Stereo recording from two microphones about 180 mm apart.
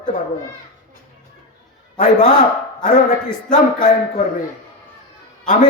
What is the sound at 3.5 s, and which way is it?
Speech, 45° left (ahead or behind).